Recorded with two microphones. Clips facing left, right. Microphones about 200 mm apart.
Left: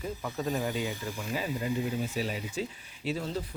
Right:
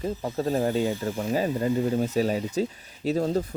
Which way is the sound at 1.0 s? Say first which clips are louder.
Right 8 dB; 55° right (ahead or behind).